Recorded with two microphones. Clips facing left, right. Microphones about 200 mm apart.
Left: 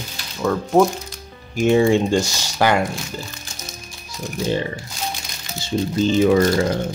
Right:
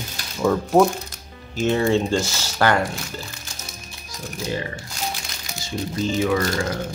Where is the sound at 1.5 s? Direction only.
15° left (ahead or behind).